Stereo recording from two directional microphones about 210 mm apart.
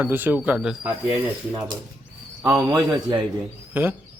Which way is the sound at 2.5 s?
20° right (ahead or behind).